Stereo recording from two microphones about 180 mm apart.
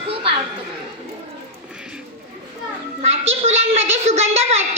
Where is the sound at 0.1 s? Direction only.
30° right (ahead or behind).